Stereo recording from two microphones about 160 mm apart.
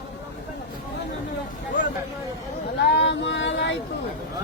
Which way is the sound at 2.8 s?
90° left.